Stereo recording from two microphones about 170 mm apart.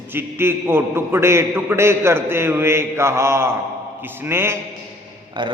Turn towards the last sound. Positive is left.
turn(degrees=-25)  # may be behind; listen again after turning